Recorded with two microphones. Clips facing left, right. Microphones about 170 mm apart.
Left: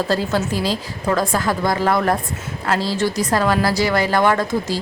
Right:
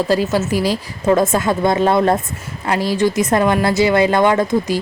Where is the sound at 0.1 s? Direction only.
10° right (ahead or behind).